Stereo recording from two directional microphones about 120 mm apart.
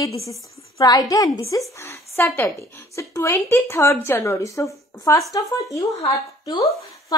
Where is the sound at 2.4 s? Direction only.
25° left (ahead or behind).